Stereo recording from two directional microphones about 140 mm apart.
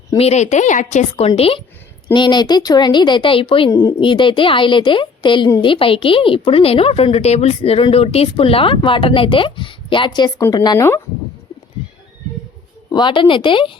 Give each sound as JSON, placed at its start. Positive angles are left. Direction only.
{"t": 0.2, "sound": "a woman's voice", "side_deg": 55}
{"t": 1.4, "sound": "a woman's voice", "side_deg": 45}
{"t": 2.1, "sound": "a woman's voice", "side_deg": 30}
{"t": 3.7, "sound": "a woman's voice", "side_deg": 25}
{"t": 4.0, "sound": "a woman's voice", "side_deg": 35}
{"t": 12.9, "sound": "a woman's voice", "side_deg": 35}